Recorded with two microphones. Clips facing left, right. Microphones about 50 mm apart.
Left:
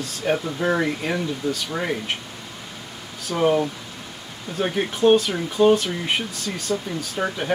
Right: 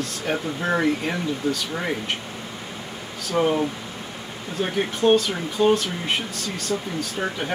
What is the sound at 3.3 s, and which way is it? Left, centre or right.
Speech, centre.